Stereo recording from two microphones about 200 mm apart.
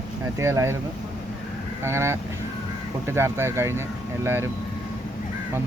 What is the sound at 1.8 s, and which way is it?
Speech, 15° right (ahead or behind).